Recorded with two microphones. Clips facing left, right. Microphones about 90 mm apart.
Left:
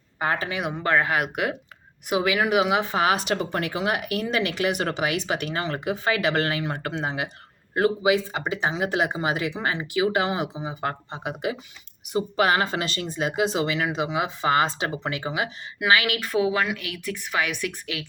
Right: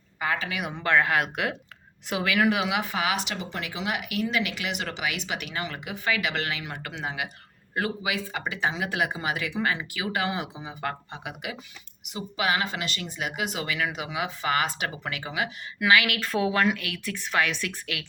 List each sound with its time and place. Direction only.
0.2 s speech: 35° left (ahead or behind)
12.1 s speech: 40° left (ahead or behind); by 18.0 s 15° left (ahead or behind)